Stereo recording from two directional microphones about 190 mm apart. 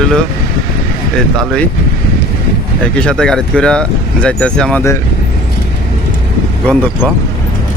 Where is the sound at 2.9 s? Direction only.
5° left (ahead or behind).